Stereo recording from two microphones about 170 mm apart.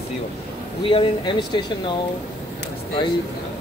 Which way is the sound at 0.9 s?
30° left (ahead or behind).